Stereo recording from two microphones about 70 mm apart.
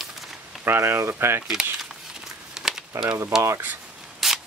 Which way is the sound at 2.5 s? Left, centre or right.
Centre.